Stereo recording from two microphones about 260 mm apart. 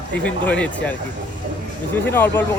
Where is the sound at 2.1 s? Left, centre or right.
Centre.